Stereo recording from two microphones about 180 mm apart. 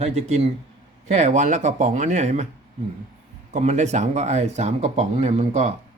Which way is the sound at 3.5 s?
40° right (ahead or behind).